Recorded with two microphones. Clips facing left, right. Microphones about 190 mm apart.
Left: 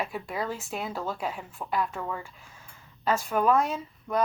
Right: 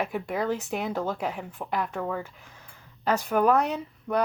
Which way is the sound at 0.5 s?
65° right (ahead or behind).